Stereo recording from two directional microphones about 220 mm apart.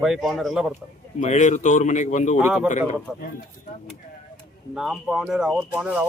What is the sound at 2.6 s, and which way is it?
Speech, 30° left (ahead or behind).